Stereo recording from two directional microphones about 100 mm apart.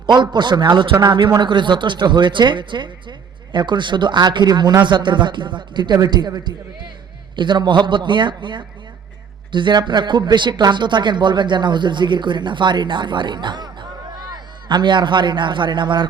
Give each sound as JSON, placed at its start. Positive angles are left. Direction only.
{"t": 0.0, "sound": "speech", "side_deg": -50}